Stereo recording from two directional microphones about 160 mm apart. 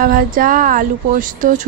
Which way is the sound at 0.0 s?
60° right (ahead or behind).